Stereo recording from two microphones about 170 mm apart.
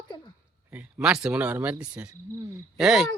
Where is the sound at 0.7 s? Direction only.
10° right (ahead or behind).